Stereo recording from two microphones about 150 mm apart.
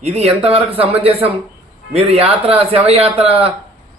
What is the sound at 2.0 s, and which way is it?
A man's voice, 40° right (ahead or behind).